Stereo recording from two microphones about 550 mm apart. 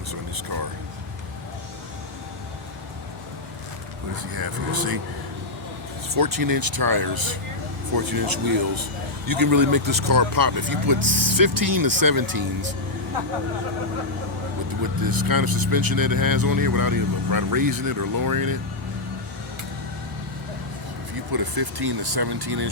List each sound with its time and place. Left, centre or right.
0.1 s a sound: right
4.3 s speech: right
6.1 s speech: right
15.0 s speech: right
21.3 s speech: right